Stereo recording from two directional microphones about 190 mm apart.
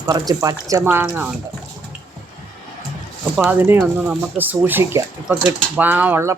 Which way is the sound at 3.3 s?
10° right (ahead or behind).